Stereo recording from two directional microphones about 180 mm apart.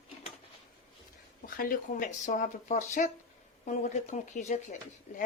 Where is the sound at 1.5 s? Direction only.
50° left (ahead or behind).